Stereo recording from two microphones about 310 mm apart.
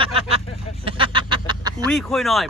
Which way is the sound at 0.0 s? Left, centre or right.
Centre.